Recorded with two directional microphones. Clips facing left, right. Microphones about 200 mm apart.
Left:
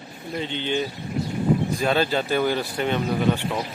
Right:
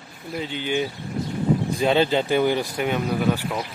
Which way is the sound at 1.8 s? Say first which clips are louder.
Right 3 dB; 20° right (ahead or behind).